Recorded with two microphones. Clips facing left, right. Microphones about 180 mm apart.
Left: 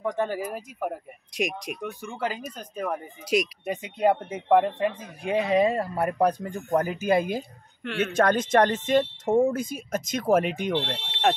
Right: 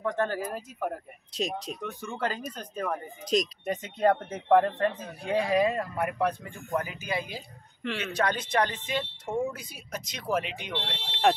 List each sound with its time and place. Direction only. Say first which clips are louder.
0.0 s speech: left 2 dB; 15° left (ahead or behind); by 11.0 s 45° left (ahead or behind)
11.1 s speech: right 1 dB; centre (ahead or behind)